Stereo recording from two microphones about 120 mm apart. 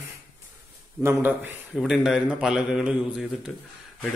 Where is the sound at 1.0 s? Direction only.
15° right (ahead or behind).